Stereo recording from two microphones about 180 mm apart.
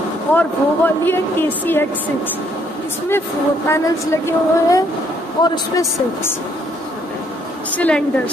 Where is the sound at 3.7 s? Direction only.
15° left (ahead or behind).